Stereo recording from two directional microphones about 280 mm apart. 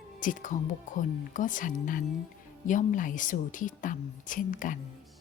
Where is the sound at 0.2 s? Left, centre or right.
Left.